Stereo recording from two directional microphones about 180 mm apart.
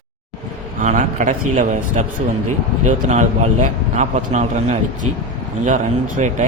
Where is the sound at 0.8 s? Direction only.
45° right (ahead or behind).